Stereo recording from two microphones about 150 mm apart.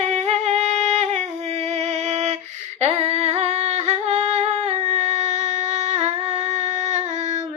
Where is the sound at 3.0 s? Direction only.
45° right (ahead or behind).